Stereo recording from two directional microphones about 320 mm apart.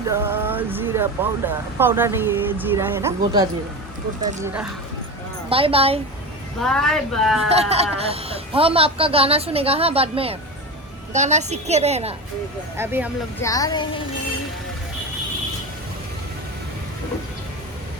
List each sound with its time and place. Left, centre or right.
0.1 s speech: centre
5.5 s speech: centre
6.6 s speech: centre
7.5 s a woman's voice: centre
12.7 s speech: centre
13.4 s speech: centre